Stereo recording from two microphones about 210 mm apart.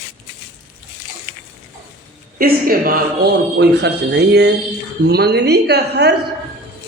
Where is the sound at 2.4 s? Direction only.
45° right (ahead or behind).